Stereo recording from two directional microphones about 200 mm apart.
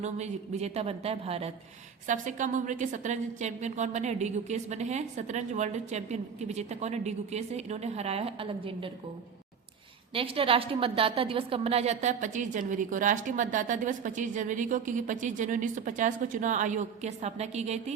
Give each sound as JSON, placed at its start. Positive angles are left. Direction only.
{"t": 0.0, "sound": "a woman's voice", "side_deg": -35}
{"t": 10.2, "sound": "a woman's voice", "side_deg": -25}